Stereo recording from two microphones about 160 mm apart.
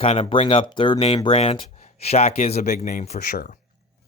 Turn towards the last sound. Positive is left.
turn(degrees=45)  # may be behind; listen again after turning